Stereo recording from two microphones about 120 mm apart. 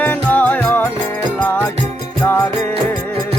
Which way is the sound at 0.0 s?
15° left (ahead or behind).